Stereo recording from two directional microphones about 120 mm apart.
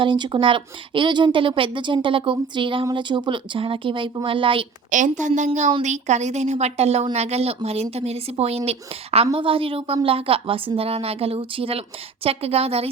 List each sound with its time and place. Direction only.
0.0 s a woman's voice: 40° right (ahead or behind)
4.9 s a woman's voice: 90° right
5.8 s speech: 75° right (ahead or behind); by 12.9 s 55° right (ahead or behind)